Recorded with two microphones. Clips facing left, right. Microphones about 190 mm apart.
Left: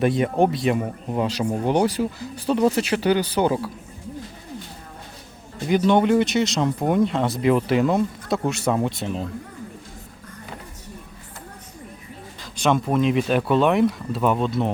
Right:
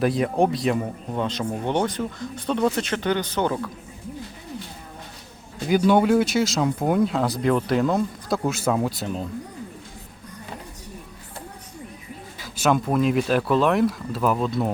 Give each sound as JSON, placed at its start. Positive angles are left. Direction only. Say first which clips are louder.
{"t": 0.0, "sound": "speech", "louder": "left 1 dB", "side_deg": 0}
{"t": 5.6, "sound": "speech", "louder": "even", "side_deg": -5}
{"t": 12.4, "sound": "speech", "louder": "even", "side_deg": -5}